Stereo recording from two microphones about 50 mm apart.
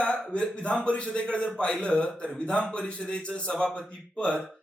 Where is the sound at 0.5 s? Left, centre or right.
Left.